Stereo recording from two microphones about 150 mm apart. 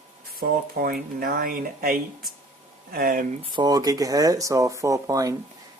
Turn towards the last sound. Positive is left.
turn(degrees=-25)  # may be behind; listen again after turning